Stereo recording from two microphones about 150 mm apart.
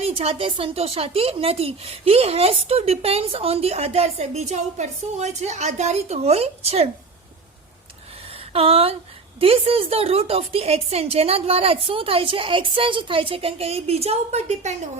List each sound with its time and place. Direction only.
0.0 s a woman's voice: 40° right (ahead or behind)
8.3 s a sound: 40° right (ahead or behind)
9.4 s a woman's voice: 40° right (ahead or behind)